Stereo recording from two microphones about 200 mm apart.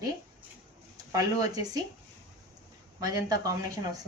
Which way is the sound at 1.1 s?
15° right (ahead or behind).